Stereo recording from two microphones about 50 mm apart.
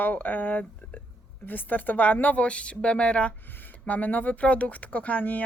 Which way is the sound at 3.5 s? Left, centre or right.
Left.